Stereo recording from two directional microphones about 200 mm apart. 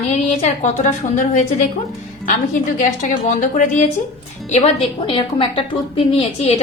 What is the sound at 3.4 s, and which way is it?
A woman's voice, 40° left (ahead or behind).